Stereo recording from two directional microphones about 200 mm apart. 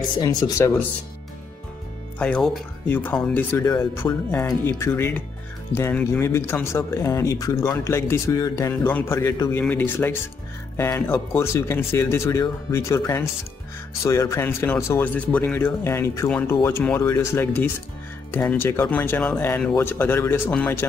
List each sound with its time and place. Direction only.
0.2 s speech: 15° left (ahead or behind)
2.1 s speech: 5° left (ahead or behind)